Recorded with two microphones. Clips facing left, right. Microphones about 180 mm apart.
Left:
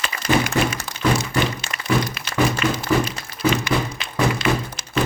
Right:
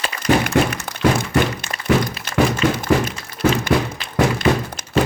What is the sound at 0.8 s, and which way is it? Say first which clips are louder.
Thunk: right 3 dB; 55° right (ahead or behind).